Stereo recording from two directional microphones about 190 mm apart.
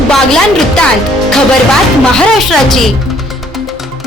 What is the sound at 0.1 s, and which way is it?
Speech, 5° left (ahead or behind).